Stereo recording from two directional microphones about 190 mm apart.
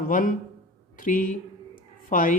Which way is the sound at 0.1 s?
45° left (ahead or behind).